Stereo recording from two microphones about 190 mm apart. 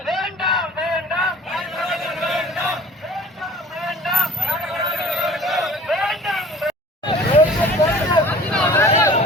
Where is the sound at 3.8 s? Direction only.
Centre (ahead or behind).